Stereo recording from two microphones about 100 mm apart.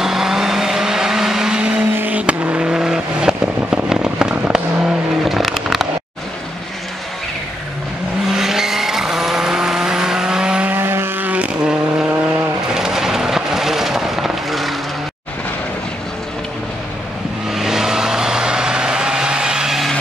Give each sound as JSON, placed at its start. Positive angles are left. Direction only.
{"t": 0.0, "sound": "vehicle", "side_deg": -5}
{"t": 8.3, "sound": "vehicle", "side_deg": -5}
{"t": 10.8, "sound": "vehicle", "side_deg": -25}
{"t": 17.5, "sound": "vehicle", "side_deg": -5}